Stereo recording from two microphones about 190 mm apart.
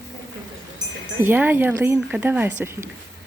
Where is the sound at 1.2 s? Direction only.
10° right (ahead or behind).